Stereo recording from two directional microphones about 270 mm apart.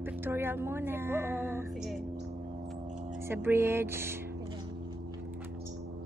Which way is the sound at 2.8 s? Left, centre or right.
Right.